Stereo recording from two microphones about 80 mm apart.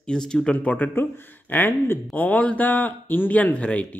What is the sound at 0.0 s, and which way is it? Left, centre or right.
Speech, centre.